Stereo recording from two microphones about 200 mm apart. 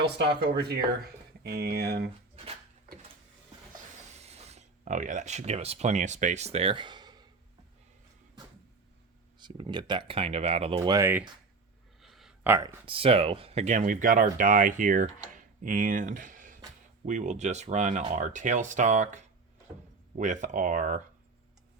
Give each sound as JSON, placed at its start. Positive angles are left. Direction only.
{"t": 0.5, "sound": "speech", "side_deg": -55}
{"t": 4.1, "sound": "speech", "side_deg": -30}
{"t": 9.4, "sound": "speech", "side_deg": -25}
{"t": 10.8, "sound": "speech", "side_deg": -15}
{"t": 12.0, "sound": "a sound", "side_deg": 0}
{"t": 12.8, "sound": "speech", "side_deg": -30}